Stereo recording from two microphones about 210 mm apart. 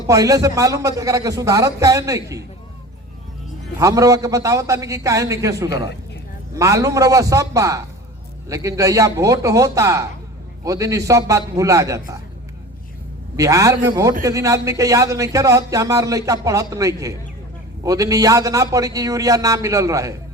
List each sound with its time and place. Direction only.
0.1 s a man's voice: 15° right (ahead or behind)
3.8 s a man's voice: 15° right (ahead or behind)
13.3 s a man's voice: 15° right (ahead or behind)